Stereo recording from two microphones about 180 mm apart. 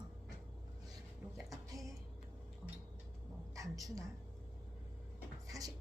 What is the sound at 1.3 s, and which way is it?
Music, centre (ahead or behind).